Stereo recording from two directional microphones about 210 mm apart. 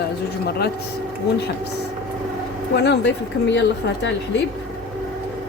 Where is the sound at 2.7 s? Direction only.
55° left (ahead or behind).